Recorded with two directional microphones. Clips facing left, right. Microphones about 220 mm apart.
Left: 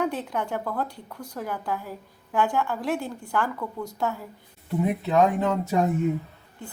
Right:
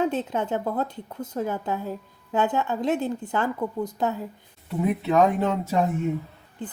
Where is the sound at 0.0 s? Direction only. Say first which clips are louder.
Right 3 dB; 20° right (ahead or behind).